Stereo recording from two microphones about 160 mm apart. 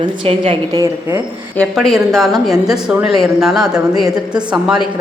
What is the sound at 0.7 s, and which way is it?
Speech, 25° right (ahead or behind).